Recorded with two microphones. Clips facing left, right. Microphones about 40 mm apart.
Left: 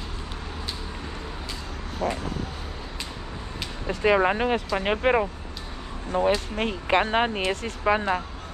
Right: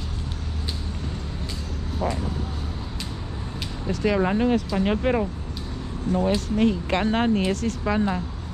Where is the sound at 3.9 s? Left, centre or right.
Left.